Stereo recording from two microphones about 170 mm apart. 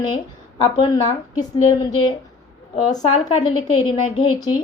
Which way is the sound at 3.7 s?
30° left (ahead or behind).